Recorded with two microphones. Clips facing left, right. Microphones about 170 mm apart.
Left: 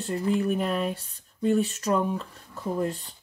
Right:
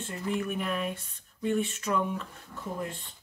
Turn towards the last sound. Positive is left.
turn(degrees=40)  # may be behind; listen again after turning